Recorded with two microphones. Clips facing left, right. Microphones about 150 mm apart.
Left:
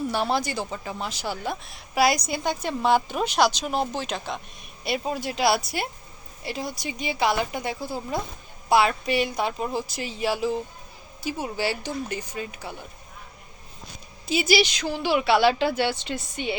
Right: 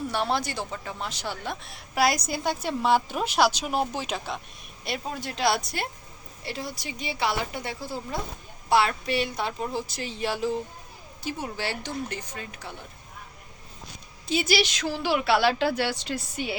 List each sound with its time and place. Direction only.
0.1 s speech: centre (ahead or behind)
4.8 s speech: 5° left (ahead or behind)
14.3 s speech: 5° left (ahead or behind)